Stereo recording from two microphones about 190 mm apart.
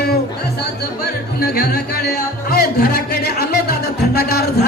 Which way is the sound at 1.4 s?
55° left (ahead or behind).